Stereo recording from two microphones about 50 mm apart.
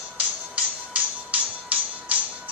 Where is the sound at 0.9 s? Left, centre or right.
Right.